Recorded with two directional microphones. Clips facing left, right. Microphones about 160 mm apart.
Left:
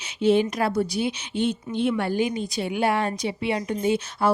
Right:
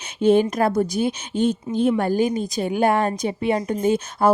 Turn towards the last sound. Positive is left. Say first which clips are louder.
# right 4 dB
turn(degrees=-45)  # may be behind; listen again after turning